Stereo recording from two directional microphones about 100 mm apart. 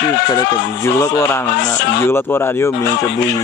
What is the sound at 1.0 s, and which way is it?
Speech, 25° left (ahead or behind).